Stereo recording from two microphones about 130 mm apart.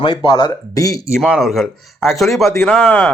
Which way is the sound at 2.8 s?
15° left (ahead or behind).